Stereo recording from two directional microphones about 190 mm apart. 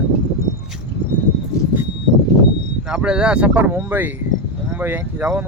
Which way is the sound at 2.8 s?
5° right (ahead or behind).